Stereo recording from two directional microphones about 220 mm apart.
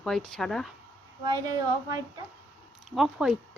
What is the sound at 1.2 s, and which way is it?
Speech, 15° right (ahead or behind).